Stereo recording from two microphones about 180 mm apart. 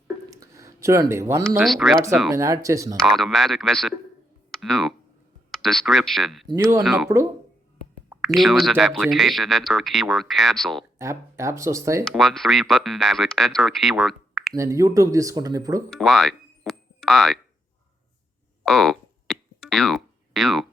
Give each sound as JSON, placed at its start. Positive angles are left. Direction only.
{"t": 0.3, "sound": "a sound", "side_deg": -15}
{"t": 1.5, "sound": "speech", "side_deg": 0}
{"t": 2.3, "sound": "speech", "side_deg": -15}
{"t": 3.1, "sound": "speech", "side_deg": 0}
{"t": 6.5, "sound": "speech", "side_deg": -20}
{"t": 6.8, "sound": "speech", "side_deg": 0}
{"t": 8.1, "sound": "speech", "side_deg": -5}
{"t": 10.9, "sound": "speech", "side_deg": -15}
{"t": 12.1, "sound": "speech", "side_deg": 0}
{"t": 14.5, "sound": "speech", "side_deg": -15}
{"t": 15.9, "sound": "speech", "side_deg": 0}
{"t": 18.6, "sound": "a sound", "side_deg": 0}